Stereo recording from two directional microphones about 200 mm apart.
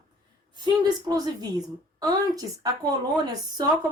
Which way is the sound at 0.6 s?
20° right (ahead or behind).